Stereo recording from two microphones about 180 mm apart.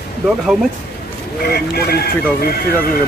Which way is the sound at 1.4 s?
60° left (ahead or behind).